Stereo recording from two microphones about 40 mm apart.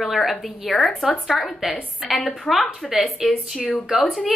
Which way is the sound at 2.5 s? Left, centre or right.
Left.